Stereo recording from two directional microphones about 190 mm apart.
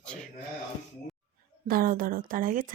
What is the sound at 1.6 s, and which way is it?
A woman's voice, 50° right (ahead or behind).